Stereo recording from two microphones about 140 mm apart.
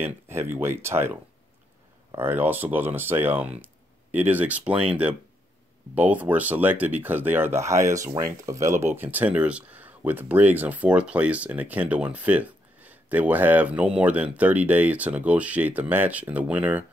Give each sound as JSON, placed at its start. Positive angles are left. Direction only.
{"t": 0.0, "sound": "speech", "side_deg": -15}
{"t": 2.1, "sound": "speech", "side_deg": -15}